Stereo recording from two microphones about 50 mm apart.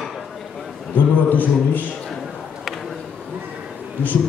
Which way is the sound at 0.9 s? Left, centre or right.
Left.